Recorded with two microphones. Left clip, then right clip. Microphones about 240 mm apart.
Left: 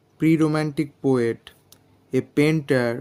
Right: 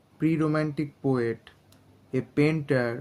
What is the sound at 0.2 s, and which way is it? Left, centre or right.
Speech, left.